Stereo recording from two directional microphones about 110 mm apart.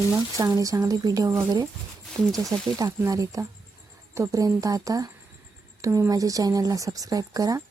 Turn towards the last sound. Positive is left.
turn(degrees=-35)  # may be behind; listen again after turning